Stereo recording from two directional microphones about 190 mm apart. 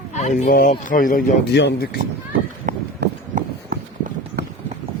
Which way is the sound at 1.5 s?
65° left (ahead or behind).